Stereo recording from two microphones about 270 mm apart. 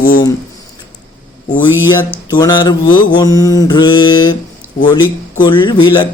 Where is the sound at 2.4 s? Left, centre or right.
Centre.